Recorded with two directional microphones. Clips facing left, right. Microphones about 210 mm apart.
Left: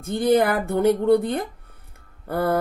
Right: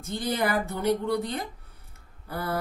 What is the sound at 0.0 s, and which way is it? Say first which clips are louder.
Speech: left 9 dB; 55° left (ahead or behind).